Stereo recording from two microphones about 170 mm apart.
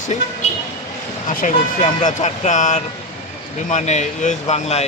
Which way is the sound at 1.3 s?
50° left (ahead or behind).